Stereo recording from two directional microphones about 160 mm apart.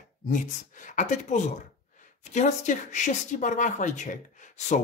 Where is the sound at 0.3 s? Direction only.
55° left (ahead or behind).